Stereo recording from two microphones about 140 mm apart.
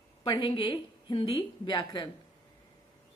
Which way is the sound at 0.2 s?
35° left (ahead or behind).